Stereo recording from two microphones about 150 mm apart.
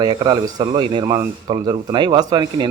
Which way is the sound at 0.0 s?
30° right (ahead or behind).